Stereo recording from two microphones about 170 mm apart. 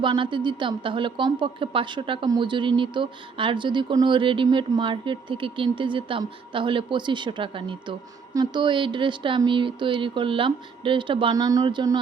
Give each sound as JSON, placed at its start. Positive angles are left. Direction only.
{"t": 0.0, "sound": "a woman's voice", "side_deg": -30}